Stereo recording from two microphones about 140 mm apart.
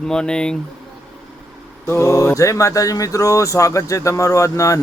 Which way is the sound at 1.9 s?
20° left (ahead or behind).